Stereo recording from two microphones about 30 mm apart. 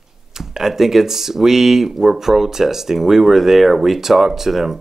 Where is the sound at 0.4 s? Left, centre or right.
Centre.